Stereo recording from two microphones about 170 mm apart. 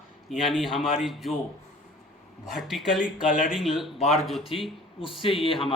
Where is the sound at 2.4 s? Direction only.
Centre (ahead or behind).